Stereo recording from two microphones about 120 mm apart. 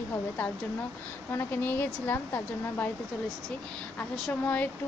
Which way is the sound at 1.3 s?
20° left (ahead or behind).